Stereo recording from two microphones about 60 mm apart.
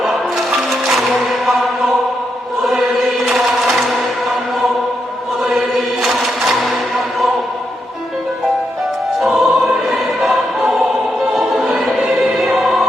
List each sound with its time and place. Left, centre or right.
0.0 s music: centre
3.2 s chant: centre
5.4 s music: centre
9.2 s music: centre
10.2 s choir: centre